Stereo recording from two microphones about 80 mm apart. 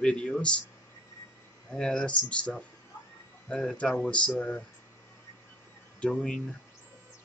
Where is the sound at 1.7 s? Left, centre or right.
Centre.